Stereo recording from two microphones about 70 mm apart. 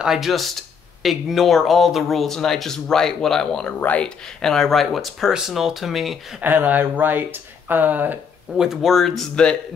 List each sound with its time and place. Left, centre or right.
0.0 s speech: centre
3.8 s speech: left
4.4 s speech: centre
6.4 s speech: right
8.5 s speech: centre